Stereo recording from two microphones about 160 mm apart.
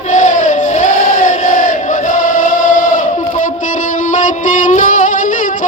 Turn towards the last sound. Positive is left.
turn(degrees=50)  # may be behind; listen again after turning